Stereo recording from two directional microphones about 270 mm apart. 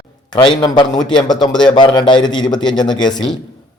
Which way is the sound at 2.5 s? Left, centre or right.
Centre.